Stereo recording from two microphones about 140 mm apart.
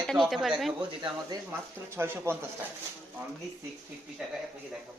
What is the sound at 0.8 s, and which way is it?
Speech, 35° right (ahead or behind).